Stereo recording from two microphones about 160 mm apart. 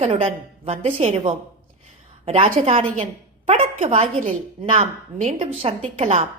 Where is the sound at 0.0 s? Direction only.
45° right (ahead or behind).